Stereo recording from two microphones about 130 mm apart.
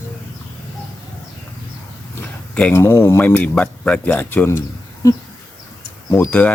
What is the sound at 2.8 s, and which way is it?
Speech, 20° left (ahead or behind).